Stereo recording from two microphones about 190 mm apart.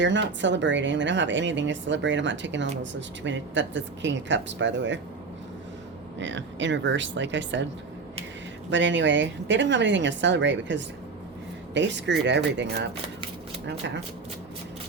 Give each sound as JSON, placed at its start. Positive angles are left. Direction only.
{"t": 0.0, "sound": "a woman's voice", "side_deg": -70}
{"t": 6.1, "sound": "a woman's voice", "side_deg": -70}
{"t": 8.7, "sound": "a woman's voice", "side_deg": -70}